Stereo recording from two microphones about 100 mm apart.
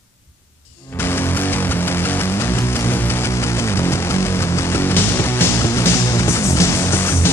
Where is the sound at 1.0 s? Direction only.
20° left (ahead or behind).